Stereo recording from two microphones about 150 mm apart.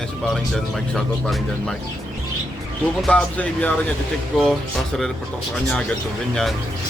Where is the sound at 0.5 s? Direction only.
5° left (ahead or behind).